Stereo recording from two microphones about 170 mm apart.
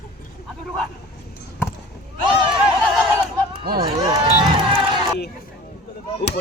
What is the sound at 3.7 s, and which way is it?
Run, 25° right (ahead or behind).